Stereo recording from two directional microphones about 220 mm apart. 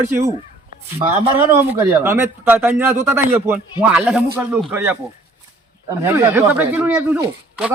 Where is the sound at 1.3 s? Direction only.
10° right (ahead or behind).